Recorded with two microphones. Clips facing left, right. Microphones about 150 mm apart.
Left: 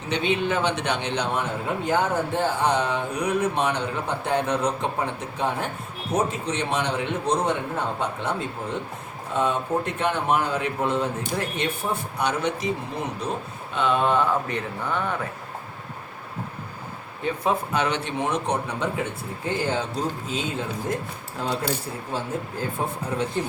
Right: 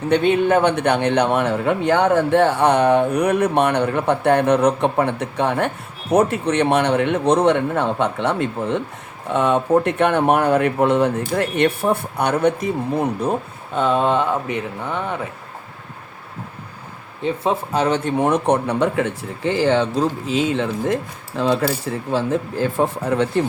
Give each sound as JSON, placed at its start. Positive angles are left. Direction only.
{"t": 0.1, "sound": "a man's voice", "side_deg": -55}
{"t": 13.7, "sound": "speech", "side_deg": -35}
{"t": 17.2, "sound": "speech", "side_deg": -30}